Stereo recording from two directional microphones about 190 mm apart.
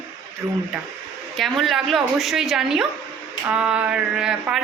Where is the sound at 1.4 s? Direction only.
Centre (ahead or behind).